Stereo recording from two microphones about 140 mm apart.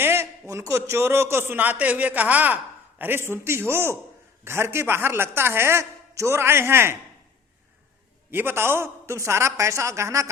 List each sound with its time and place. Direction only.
0.0 s a man's voice: 15° right (ahead or behind)
8.3 s a man's voice: 15° right (ahead or behind)